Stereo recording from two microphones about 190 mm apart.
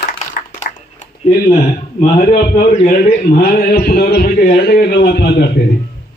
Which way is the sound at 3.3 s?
50° left (ahead or behind).